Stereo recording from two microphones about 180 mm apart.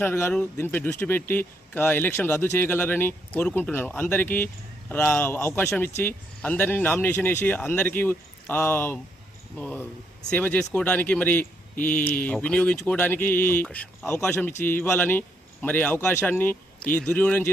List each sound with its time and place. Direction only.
0.0 s speech: 10° left (ahead or behind)